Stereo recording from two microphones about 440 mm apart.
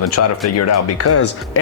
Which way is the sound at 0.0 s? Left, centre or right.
Left.